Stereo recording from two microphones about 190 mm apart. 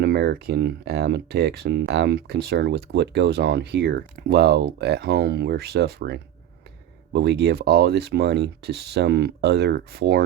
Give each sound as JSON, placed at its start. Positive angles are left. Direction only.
{"t": 0.0, "sound": "speech", "side_deg": -60}